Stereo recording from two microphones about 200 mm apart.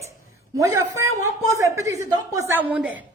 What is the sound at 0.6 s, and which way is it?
A woman's voice, 15° right (ahead or behind).